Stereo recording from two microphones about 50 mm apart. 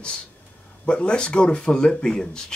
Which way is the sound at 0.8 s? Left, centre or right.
Left.